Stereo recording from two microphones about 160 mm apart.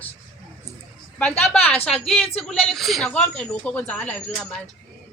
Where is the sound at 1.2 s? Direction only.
10° left (ahead or behind).